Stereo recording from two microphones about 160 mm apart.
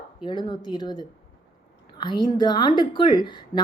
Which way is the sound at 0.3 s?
30° left (ahead or behind).